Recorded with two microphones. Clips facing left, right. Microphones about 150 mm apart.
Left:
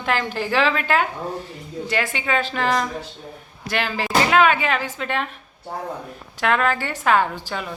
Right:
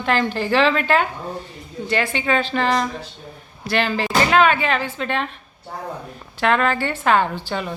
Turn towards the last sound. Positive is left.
turn(degrees=0)  # may be behind; listen again after turning